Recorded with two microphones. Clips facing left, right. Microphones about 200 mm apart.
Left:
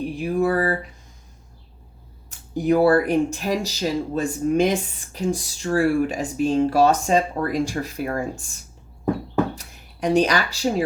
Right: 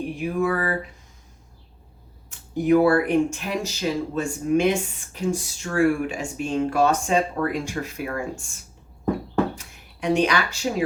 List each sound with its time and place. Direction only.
0.2 s speech: 35° left (ahead or behind)
2.6 s speech: 35° left (ahead or behind)
9.6 s speech: 35° left (ahead or behind)